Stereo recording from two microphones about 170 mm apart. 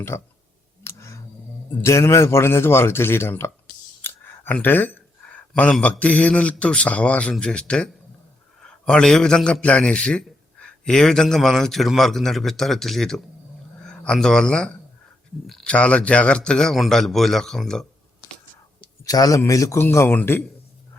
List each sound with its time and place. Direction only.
0.1 s a man's voice: 15° left (ahead or behind)
0.9 s a sound: 15° left (ahead or behind)
1.8 s a man's voice: 15° left (ahead or behind)
19.0 s a man's voice: 20° left (ahead or behind)